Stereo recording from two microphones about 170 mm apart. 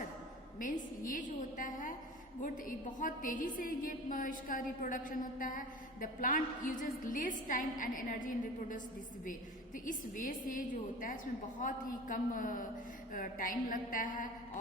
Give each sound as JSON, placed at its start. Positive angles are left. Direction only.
{"t": 0.6, "sound": "a woman's voice", "side_deg": 50}
{"t": 11.6, "sound": "a woman's voice", "side_deg": 50}